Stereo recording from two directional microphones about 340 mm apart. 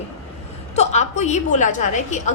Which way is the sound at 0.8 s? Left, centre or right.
Centre.